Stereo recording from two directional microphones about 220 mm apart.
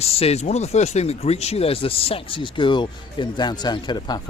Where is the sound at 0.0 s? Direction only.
25° left (ahead or behind).